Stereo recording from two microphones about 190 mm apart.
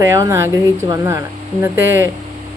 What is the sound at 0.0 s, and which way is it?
Speech, 15° right (ahead or behind).